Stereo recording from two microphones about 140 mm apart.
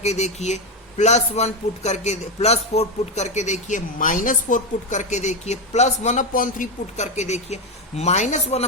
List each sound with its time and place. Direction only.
0.0 s a man's voice: 50° left (ahead or behind)